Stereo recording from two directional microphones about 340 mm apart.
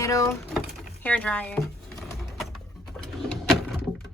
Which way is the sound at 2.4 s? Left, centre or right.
Centre.